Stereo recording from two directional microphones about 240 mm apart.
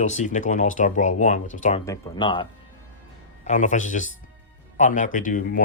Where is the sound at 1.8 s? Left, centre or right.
Centre.